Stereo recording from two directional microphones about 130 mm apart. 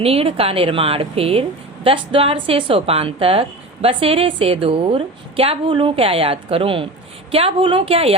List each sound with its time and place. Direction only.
0.0 s a woman's voice: 50° right (ahead or behind)